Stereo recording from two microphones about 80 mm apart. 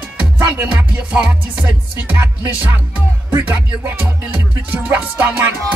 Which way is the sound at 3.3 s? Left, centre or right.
Right.